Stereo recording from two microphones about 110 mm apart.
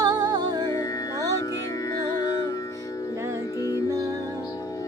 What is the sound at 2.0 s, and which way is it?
Music, 25° left (ahead or behind).